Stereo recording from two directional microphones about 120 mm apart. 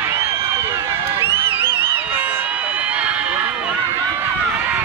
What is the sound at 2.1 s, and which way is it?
Run, 15° right (ahead or behind).